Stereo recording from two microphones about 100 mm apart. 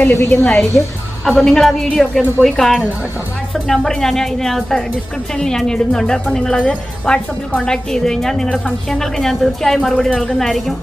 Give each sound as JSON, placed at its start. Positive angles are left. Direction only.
{"t": 0.0, "sound": "a woman's voice", "side_deg": 20}
{"t": 1.2, "sound": "a woman's voice", "side_deg": 5}